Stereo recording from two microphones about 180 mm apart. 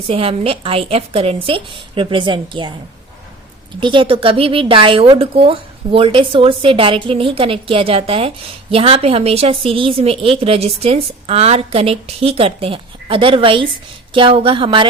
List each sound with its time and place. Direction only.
0.1 s a woman's voice: 30° right (ahead or behind)
3.8 s a woman's voice: 25° right (ahead or behind)